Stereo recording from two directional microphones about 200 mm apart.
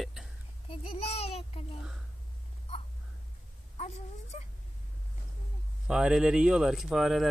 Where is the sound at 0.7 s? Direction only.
30° left (ahead or behind).